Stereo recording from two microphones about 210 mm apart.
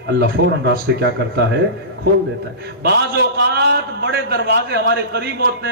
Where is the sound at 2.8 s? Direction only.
50° right (ahead or behind).